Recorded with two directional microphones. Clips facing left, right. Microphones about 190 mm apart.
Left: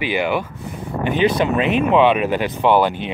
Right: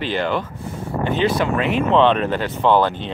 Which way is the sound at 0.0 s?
10° left (ahead or behind).